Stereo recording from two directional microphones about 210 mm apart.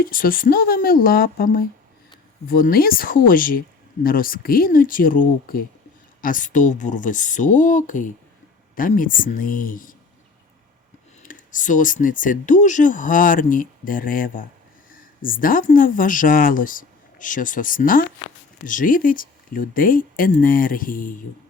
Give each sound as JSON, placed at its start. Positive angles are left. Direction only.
{"t": 0.0, "sound": "speech", "side_deg": 40}
{"t": 11.2, "sound": "speech", "side_deg": 40}